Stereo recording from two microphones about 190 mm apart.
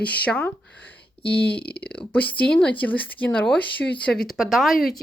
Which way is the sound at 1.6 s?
55° left (ahead or behind).